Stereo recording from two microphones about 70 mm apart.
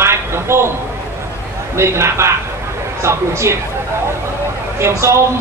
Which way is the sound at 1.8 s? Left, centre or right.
Right.